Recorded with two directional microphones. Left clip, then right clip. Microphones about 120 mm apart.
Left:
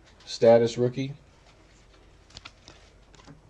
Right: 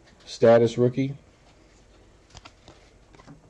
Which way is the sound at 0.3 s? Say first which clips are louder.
Right 1 dB; 15° right (ahead or behind).